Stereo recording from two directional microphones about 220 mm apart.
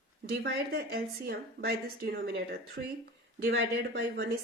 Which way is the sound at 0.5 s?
45° right (ahead or behind).